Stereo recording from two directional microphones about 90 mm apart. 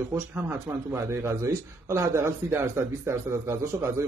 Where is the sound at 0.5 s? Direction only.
30° right (ahead or behind).